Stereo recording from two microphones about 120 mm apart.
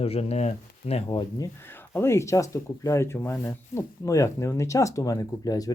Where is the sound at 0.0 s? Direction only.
55° left (ahead or behind).